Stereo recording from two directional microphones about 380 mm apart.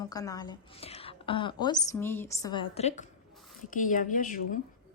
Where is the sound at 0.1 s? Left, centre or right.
Centre.